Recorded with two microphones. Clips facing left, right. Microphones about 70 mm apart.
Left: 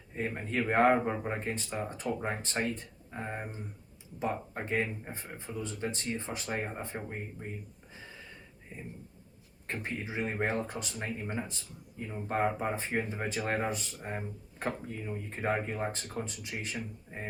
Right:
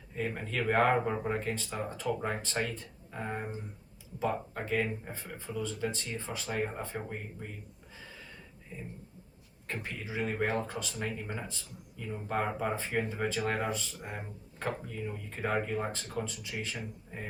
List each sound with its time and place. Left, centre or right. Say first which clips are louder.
0.1 s speech: left 1 dB; left
9.8 s speech: left 1 dB; left